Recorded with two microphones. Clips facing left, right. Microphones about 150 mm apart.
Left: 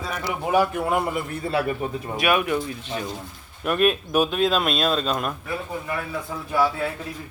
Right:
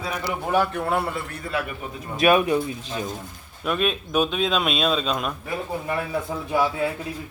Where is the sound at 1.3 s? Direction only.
30° left (ahead or behind).